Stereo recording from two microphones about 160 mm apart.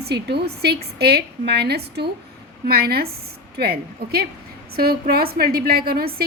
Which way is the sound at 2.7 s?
70° right (ahead or behind).